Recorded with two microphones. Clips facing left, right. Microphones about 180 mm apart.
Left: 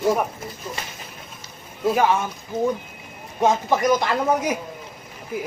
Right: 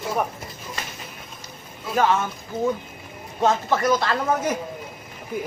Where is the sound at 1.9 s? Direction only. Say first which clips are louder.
Right 1 dB; 10° left (ahead or behind).